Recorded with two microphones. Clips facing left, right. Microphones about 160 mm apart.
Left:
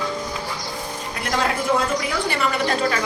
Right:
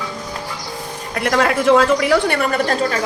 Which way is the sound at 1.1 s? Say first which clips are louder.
Right 7 dB; 65° right (ahead or behind).